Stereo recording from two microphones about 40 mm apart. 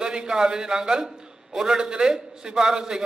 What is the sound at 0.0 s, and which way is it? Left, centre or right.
A man's voice, centre.